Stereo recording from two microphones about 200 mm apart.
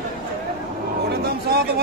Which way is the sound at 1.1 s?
50° right (ahead or behind).